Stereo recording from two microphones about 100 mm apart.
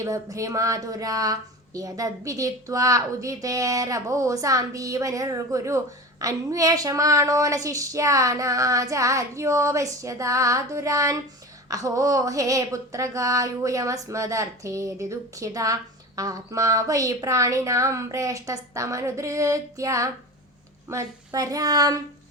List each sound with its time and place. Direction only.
0.0 s speech: 30° right (ahead or behind)